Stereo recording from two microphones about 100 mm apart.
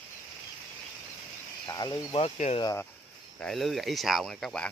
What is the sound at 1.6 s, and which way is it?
Speech, 45° left (ahead or behind).